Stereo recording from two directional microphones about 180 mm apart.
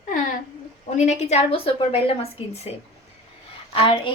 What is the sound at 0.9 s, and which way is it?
A woman's voice, 40° left (ahead or behind).